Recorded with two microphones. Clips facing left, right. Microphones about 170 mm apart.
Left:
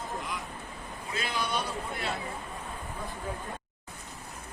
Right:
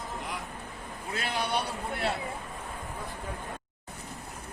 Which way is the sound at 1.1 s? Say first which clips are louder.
Right 1 dB; 65° right (ahead or behind).